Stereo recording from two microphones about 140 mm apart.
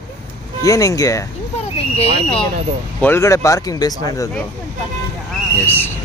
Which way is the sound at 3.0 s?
15° left (ahead or behind).